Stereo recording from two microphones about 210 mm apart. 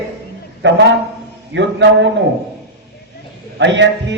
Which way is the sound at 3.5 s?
55° right (ahead or behind).